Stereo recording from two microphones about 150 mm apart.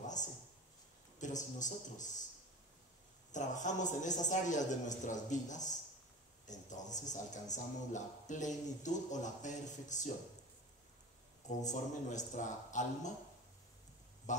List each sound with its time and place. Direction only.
0.0 s a sound: 55° left (ahead or behind)
1.2 s a man's voice: 55° left (ahead or behind)
3.3 s a man's voice: 55° left (ahead or behind)
11.4 s a man's voice: 55° left (ahead or behind)